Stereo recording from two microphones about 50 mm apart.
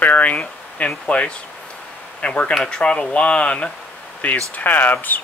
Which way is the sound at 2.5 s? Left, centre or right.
Centre.